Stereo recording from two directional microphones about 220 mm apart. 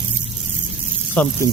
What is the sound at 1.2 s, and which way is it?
Speech, 5° left (ahead or behind).